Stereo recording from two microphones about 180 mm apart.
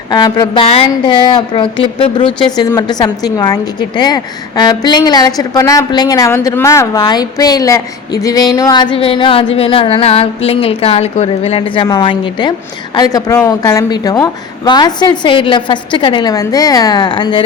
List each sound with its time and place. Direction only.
0.1 s a woman's voice: 25° left (ahead or behind)